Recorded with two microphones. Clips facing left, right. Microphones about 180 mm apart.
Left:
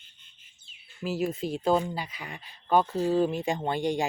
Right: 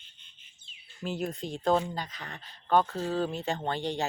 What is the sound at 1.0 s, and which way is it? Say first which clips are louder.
Speech: left 4 dB; 5° left (ahead or behind).